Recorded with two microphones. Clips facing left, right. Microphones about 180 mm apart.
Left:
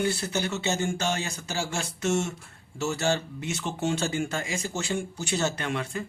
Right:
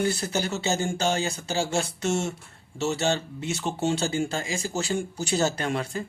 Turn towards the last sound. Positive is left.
turn(degrees=-35)  # may be behind; listen again after turning